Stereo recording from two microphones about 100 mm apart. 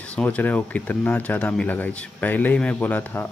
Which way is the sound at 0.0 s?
15° left (ahead or behind).